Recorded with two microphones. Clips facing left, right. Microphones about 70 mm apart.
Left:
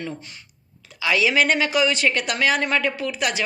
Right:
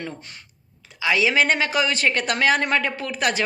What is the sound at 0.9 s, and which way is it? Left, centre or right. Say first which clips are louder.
Speech: even; right.